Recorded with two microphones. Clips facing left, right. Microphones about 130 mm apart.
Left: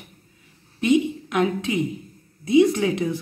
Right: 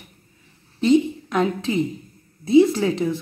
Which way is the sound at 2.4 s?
30° right (ahead or behind).